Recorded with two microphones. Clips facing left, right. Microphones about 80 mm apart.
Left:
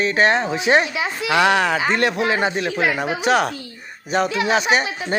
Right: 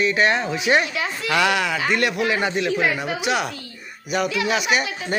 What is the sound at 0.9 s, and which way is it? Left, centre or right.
Speech, centre.